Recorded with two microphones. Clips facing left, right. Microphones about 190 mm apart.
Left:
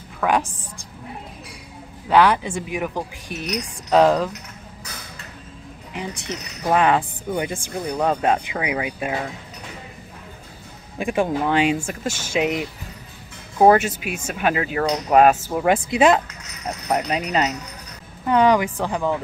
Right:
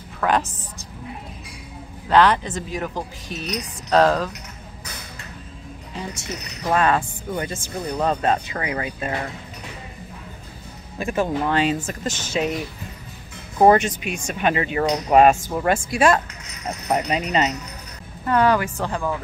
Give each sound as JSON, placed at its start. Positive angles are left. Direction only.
{"t": 0.2, "sound": "a woman's voice", "side_deg": 10}
{"t": 2.0, "sound": "speech", "side_deg": 10}
{"t": 5.9, "sound": "speech", "side_deg": 15}
{"t": 11.0, "sound": "speech", "side_deg": 15}
{"t": 13.6, "sound": "speech", "side_deg": 5}
{"t": 16.6, "sound": "speech", "side_deg": -5}
{"t": 18.2, "sound": "speech", "side_deg": 15}